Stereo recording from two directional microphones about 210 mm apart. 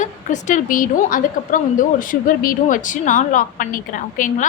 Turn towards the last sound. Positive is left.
turn(degrees=40)  # may be behind; listen again after turning